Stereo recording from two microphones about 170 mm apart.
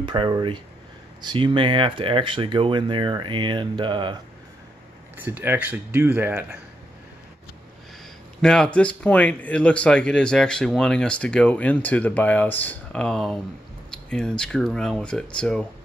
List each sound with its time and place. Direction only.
0.0 s speech: 30° right (ahead or behind)
5.1 s speech: 10° right (ahead or behind)
8.4 s speech: 5° left (ahead or behind)